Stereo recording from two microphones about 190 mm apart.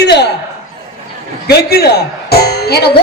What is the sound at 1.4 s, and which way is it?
Speech, 55° left (ahead or behind).